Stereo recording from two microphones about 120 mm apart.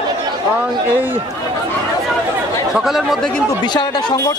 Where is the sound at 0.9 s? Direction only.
15° right (ahead or behind).